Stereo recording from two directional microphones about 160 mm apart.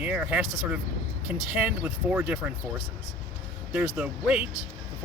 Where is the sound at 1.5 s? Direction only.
10° right (ahead or behind).